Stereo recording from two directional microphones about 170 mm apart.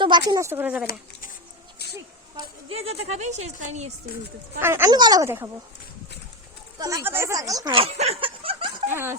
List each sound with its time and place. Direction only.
0.0 s speech: 25° right (ahead or behind); by 0.9 s 10° right (ahead or behind)
2.6 s a woman's voice: 35° right (ahead or behind)
4.6 s speech: 15° right (ahead or behind)
6.7 s speech: 20° right (ahead or behind)
7.8 s a woman's voice: 40° right (ahead or behind)
8.9 s speech: 15° right (ahead or behind)